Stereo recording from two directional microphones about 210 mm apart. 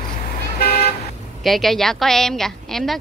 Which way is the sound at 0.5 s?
45° left (ahead or behind).